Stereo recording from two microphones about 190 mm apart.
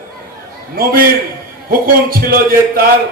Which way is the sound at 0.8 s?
50° right (ahead or behind).